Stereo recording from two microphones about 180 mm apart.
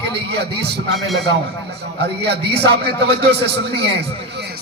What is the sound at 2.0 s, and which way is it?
A man's voice, 70° right (ahead or behind).